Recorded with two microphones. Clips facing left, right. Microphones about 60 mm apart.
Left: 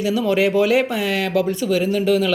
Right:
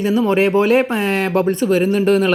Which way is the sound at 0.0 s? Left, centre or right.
Right.